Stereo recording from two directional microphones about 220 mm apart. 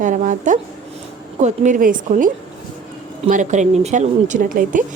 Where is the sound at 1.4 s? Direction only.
30° right (ahead or behind).